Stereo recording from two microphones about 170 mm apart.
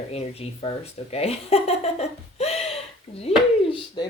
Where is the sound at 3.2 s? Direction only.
35° left (ahead or behind).